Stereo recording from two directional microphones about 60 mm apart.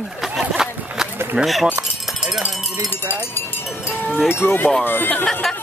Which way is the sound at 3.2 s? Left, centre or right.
Left.